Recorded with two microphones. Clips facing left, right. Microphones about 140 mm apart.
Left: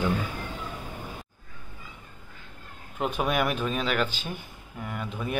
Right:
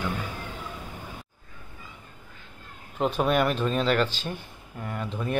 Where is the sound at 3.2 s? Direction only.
5° left (ahead or behind).